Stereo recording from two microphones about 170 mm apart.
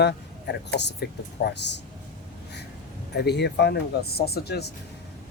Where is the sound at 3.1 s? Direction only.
75° left (ahead or behind).